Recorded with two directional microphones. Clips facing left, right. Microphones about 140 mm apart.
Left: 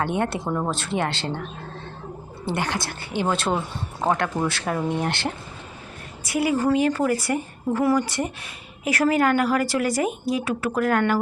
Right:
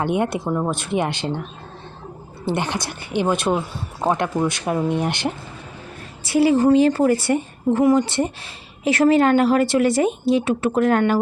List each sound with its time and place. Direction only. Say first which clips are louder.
0.0 s speech: right 3 dB; 15° right (ahead or behind)
0.4 s speech: right 3 dB; 5° right (ahead or behind)
0.7 s speech: right 3 dB; 15° right (ahead or behind)
2.5 s a woman's voice: right 3 dB; 20° right (ahead or behind)
6.2 s a woman's voice: right 6 dB; 30° right (ahead or behind)